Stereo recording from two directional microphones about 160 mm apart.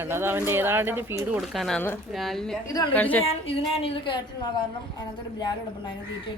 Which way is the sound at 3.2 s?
35° left (ahead or behind).